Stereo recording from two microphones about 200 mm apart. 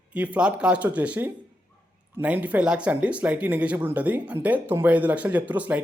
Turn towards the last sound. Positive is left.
turn(degrees=-10)  # may be behind; listen again after turning